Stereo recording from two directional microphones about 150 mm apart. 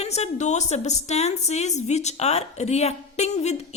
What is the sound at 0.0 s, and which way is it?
A woman's voice, 45° left (ahead or behind).